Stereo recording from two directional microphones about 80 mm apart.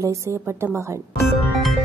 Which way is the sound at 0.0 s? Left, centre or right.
Right.